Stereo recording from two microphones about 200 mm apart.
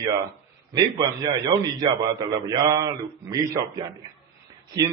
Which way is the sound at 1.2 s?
20° right (ahead or behind).